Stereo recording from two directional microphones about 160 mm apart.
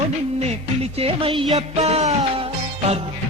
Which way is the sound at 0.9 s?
35° right (ahead or behind).